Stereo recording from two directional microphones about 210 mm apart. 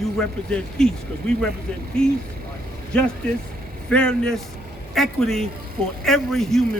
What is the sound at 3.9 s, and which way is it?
A man's voice, 5° left (ahead or behind).